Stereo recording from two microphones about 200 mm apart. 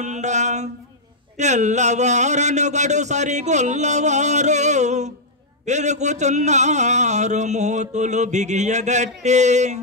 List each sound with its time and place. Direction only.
0.0 s a man's voice: 35° right (ahead or behind)